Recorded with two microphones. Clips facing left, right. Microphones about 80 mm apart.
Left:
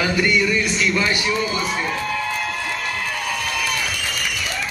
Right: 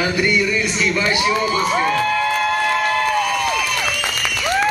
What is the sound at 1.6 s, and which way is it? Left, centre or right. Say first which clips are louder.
Music: right 6 dB; right.